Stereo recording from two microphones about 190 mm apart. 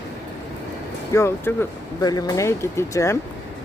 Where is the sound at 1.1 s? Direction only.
15° left (ahead or behind).